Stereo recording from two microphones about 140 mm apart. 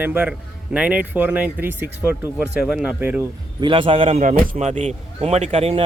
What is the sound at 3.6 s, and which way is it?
Speech, 40° right (ahead or behind).